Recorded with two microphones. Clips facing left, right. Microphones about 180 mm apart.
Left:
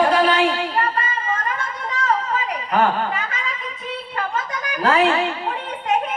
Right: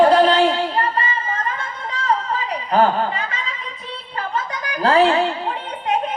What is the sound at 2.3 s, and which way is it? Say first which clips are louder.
Chuckle: right 2 dB; 35° right (ahead or behind).